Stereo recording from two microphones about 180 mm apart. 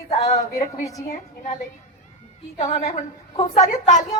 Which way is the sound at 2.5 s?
40° left (ahead or behind).